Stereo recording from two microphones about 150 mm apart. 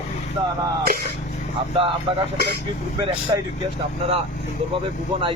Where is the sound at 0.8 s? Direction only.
90° right.